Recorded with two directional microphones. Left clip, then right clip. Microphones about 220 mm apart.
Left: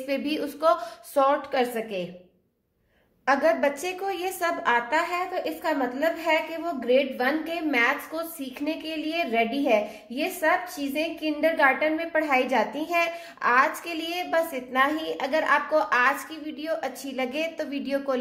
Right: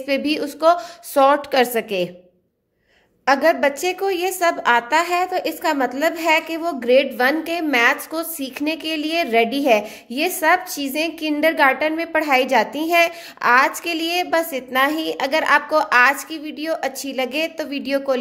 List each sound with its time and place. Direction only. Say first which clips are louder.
0.0 s a woman's voice: right 7 dB; 35° right (ahead or behind)
3.3 s a woman's voice: right 6 dB; 35° right (ahead or behind)